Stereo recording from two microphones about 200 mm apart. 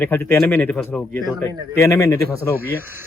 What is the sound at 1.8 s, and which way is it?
Speech, 15° left (ahead or behind).